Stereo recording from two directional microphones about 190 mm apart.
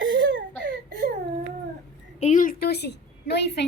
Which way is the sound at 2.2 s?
40° left (ahead or behind).